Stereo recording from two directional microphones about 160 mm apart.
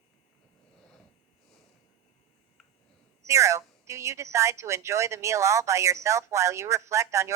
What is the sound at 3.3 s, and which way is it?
A woman's voice, 20° right (ahead or behind).